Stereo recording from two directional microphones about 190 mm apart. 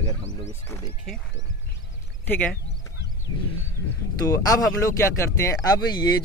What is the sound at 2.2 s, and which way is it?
Speech, 10° left (ahead or behind).